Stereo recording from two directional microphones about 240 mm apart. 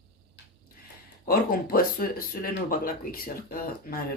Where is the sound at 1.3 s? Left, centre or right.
Left.